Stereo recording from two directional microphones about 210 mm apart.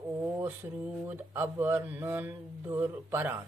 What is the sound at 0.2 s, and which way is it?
Mantra, 10° right (ahead or behind).